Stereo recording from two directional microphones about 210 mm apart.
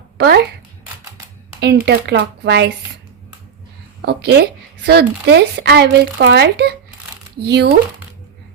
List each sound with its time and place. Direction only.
0.2 s speech: 50° right (ahead or behind)
1.6 s speech: 50° right (ahead or behind)
4.0 s speech: 50° right (ahead or behind)